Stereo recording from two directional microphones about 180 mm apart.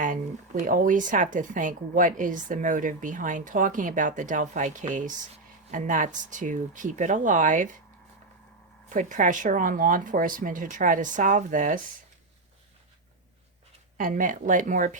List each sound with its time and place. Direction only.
0.0 s speech: 45° right (ahead or behind)
8.9 s speech: 45° right (ahead or behind)
14.0 s speech: 45° right (ahead or behind)